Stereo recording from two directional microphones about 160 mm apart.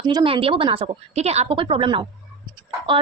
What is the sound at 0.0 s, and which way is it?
A woman's voice, 25° right (ahead or behind).